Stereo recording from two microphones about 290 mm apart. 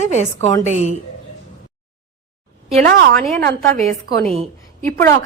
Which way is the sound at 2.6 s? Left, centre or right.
Right.